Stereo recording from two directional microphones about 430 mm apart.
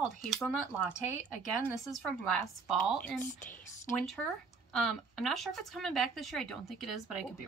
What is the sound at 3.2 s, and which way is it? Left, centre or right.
Speech, centre.